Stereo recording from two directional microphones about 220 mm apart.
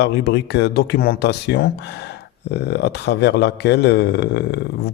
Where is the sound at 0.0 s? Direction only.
50° left (ahead or behind).